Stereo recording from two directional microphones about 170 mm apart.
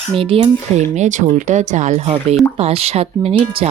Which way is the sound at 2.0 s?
30° right (ahead or behind).